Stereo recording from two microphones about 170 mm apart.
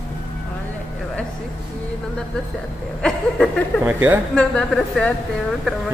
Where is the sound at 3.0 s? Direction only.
5° left (ahead or behind).